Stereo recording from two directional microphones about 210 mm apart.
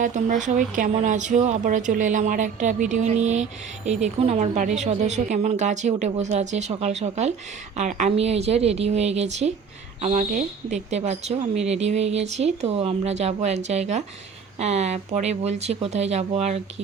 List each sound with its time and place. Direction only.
0.0 s speech: 35° right (ahead or behind)